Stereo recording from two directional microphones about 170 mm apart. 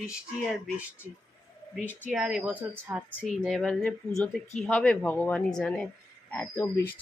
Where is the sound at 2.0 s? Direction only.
5° right (ahead or behind).